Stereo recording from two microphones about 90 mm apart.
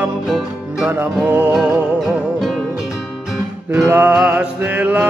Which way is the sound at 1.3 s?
15° right (ahead or behind).